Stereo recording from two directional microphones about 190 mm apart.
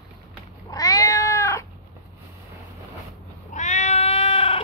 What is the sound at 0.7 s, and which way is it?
Cat, 20° left (ahead or behind).